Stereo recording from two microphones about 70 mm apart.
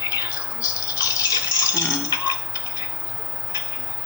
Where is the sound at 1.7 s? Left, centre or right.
Left.